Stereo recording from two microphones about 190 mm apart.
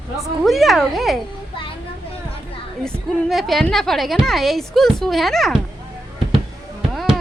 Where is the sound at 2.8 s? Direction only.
Centre (ahead or behind).